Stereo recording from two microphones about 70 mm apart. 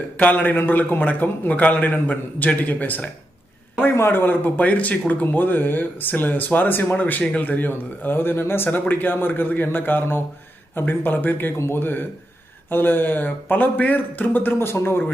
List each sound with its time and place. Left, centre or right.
0.2 s speech: left
3.8 s speech: left